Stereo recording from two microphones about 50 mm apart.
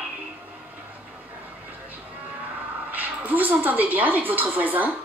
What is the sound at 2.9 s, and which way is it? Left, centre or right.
A woman's voice, right.